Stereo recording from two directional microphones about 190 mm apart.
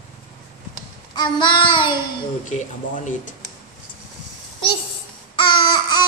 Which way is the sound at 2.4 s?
40° left (ahead or behind).